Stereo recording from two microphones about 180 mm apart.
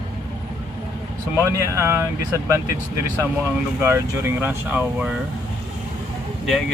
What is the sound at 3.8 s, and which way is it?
Speech, 15° right (ahead or behind).